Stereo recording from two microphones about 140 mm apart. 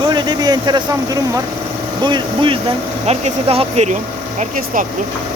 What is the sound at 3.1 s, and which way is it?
Speech, 45° right (ahead or behind).